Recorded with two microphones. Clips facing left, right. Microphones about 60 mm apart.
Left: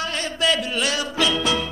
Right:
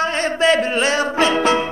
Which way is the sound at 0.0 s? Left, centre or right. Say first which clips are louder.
Right 7 dB; right.